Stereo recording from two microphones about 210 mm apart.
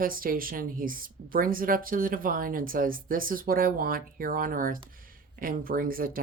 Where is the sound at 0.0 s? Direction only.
45° right (ahead or behind).